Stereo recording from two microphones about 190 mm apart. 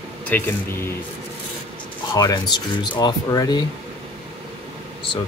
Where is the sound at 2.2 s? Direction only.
20° left (ahead or behind).